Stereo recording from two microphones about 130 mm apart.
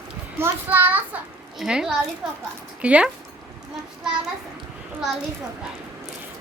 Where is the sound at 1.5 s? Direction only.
5° right (ahead or behind).